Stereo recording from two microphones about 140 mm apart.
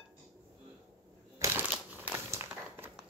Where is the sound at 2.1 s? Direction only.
20° right (ahead or behind).